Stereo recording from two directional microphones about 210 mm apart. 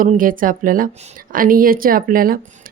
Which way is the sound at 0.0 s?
40° right (ahead or behind).